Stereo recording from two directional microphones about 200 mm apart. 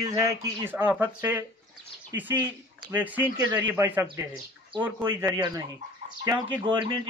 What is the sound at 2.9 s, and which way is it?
Speech, 10° right (ahead or behind).